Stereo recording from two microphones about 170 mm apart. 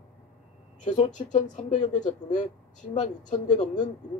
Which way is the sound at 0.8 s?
45° left (ahead or behind).